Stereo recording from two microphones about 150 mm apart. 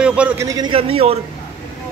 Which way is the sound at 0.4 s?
20° right (ahead or behind).